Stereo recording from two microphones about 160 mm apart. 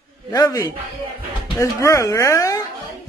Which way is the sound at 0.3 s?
20° left (ahead or behind).